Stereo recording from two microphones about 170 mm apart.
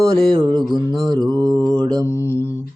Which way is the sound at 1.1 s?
25° right (ahead or behind).